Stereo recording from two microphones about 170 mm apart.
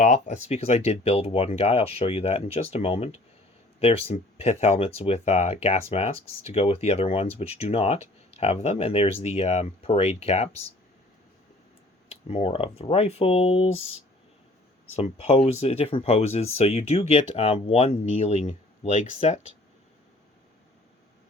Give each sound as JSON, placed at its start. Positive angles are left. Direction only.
{"t": 0.0, "sound": "speech", "side_deg": 45}
{"t": 12.0, "sound": "speech", "side_deg": 35}